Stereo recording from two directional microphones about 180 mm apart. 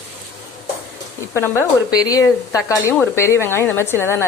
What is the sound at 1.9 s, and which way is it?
Speech, 20° left (ahead or behind).